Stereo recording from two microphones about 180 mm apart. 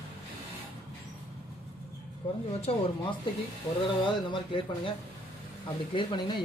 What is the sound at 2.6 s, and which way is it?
A man's voice, 30° left (ahead or behind).